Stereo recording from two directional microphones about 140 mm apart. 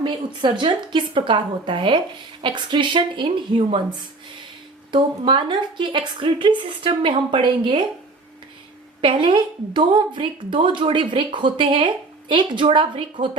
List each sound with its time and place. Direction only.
0.0 s speech: 35° right (ahead or behind)
4.9 s speech: 35° right (ahead or behind)
9.0 s speech: 35° right (ahead or behind)